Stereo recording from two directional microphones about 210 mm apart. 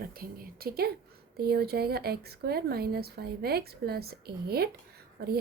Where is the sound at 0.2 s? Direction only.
45° right (ahead or behind).